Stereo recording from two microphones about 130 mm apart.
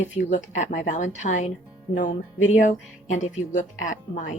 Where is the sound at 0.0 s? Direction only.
70° left (ahead or behind).